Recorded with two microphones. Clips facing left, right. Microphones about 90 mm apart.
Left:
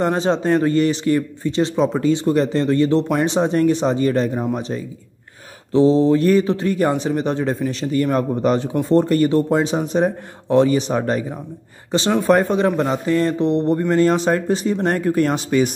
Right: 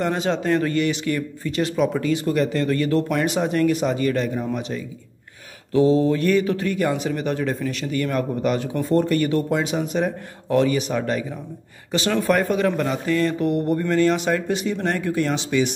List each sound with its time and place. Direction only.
0.0 s a man's voice: 30° left (ahead or behind)